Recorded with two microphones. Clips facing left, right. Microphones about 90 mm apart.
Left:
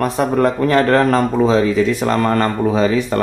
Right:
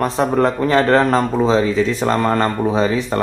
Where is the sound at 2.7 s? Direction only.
30° right (ahead or behind).